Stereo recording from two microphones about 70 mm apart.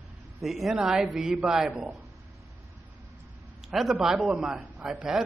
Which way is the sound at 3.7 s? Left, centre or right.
Centre.